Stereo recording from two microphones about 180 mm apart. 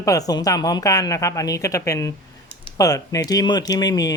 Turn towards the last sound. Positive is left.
turn(degrees=20)  # may be behind; listen again after turning